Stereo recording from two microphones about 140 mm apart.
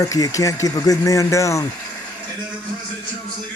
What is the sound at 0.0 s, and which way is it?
Speech, 25° left (ahead or behind).